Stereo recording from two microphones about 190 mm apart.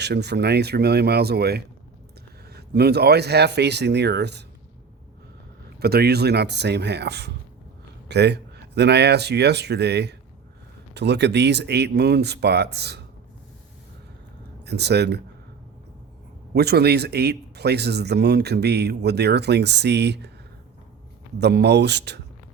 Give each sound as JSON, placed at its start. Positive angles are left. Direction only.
{"t": 0.0, "sound": "speech", "side_deg": -60}
{"t": 5.8, "sound": "speech", "side_deg": -55}
{"t": 14.6, "sound": "speech", "side_deg": -60}
{"t": 16.6, "sound": "speech", "side_deg": -60}
{"t": 21.3, "sound": "speech", "side_deg": -60}